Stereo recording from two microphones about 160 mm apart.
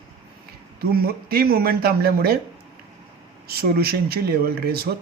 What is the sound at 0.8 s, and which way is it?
Speech, 70° right (ahead or behind).